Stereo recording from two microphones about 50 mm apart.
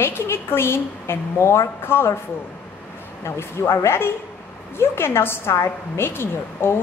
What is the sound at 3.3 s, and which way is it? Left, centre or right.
A woman's voice, left.